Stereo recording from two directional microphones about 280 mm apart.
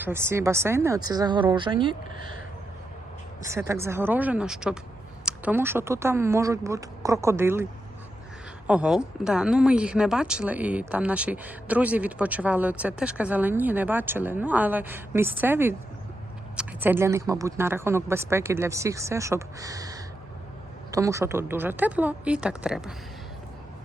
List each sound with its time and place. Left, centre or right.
0.0 s a woman's voice: centre
3.4 s a woman's voice: centre